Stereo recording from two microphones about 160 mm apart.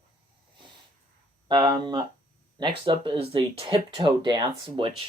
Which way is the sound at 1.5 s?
25° right (ahead or behind).